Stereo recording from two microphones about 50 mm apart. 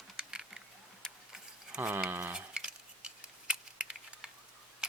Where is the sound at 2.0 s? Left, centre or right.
Right.